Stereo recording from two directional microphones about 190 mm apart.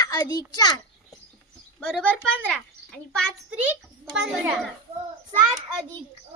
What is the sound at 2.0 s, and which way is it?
A child's voice, 5° left (ahead or behind).